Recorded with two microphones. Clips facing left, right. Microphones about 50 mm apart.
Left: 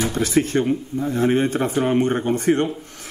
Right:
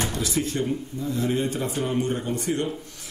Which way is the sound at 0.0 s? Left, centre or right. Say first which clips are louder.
Left 7 dB; left.